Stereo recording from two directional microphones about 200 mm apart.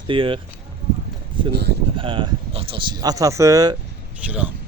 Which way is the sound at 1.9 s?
25° right (ahead or behind).